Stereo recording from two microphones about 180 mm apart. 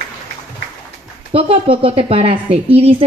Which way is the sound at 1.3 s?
30° right (ahead or behind).